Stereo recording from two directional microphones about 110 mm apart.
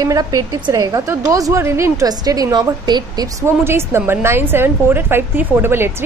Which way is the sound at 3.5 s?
25° right (ahead or behind).